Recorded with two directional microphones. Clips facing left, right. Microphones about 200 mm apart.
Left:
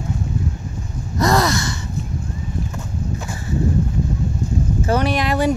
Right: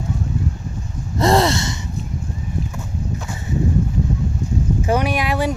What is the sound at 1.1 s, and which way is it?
Gasp, 25° right (ahead or behind).